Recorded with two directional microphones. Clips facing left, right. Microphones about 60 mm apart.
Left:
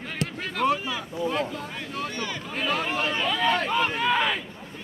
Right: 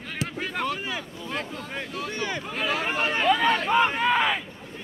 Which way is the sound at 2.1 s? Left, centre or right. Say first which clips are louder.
Right 2 dB; centre.